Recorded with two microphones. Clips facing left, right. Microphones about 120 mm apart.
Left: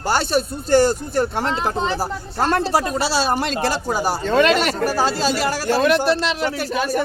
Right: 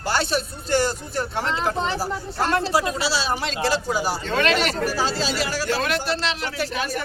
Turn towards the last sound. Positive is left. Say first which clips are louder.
# left 5 dB
turn(degrees=45)  # may be behind; listen again after turning